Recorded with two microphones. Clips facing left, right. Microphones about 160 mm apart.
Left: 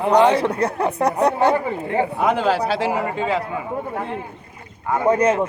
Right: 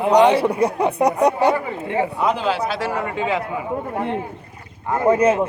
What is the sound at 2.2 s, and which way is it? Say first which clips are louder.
Speech: left 4 dB; 55° left (ahead or behind).